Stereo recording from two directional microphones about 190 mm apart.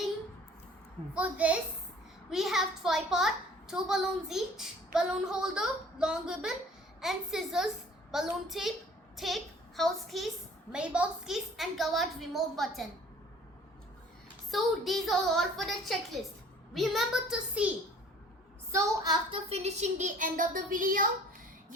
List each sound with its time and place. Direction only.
1.1 s a woman's voice: 5° right (ahead or behind)
14.5 s a child's voice: centre (ahead or behind)
18.7 s a woman's voice: 20° right (ahead or behind)
19.5 s speech: 35° right (ahead or behind)